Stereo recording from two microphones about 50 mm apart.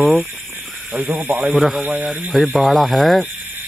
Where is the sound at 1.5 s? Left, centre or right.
Centre.